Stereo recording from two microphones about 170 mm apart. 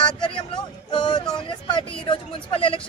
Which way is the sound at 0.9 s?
25° left (ahead or behind).